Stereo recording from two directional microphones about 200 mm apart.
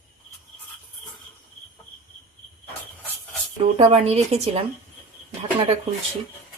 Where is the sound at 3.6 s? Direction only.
25° right (ahead or behind).